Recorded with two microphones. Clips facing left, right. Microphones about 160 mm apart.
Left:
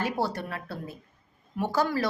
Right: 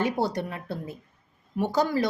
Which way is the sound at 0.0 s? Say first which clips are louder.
Right 3 dB; 20° right (ahead or behind).